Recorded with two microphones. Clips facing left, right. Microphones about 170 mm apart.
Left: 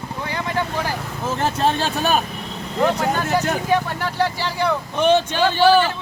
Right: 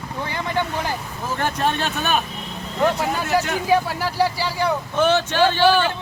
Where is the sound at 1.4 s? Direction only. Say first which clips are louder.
Left 2 dB; 25° left (ahead or behind).